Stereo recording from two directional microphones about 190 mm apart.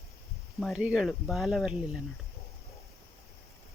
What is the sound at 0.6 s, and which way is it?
Speech, centre (ahead or behind).